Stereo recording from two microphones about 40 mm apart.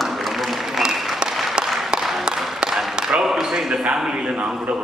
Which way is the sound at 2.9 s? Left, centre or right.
Centre.